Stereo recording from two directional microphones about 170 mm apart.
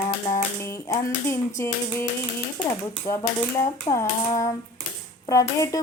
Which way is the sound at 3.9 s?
15° left (ahead or behind).